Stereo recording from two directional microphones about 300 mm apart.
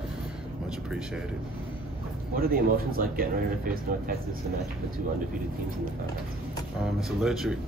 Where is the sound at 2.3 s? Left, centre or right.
Right.